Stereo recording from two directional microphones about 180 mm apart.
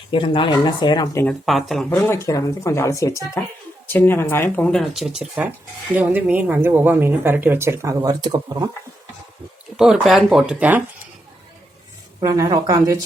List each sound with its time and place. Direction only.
0.1 s speech: 30° left (ahead or behind)
1.3 s speech: centre (ahead or behind)
1.9 s speech: 15° left (ahead or behind); by 8.6 s 20° right (ahead or behind)
9.7 s speech: 5° right (ahead or behind)
12.2 s speech: 20° right (ahead or behind)